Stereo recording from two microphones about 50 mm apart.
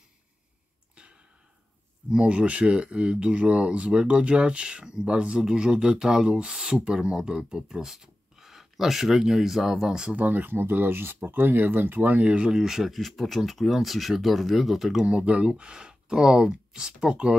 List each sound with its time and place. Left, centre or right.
2.0 s speech: right
10.1 s speech: right
12.3 s speech: centre
15.0 s speech: right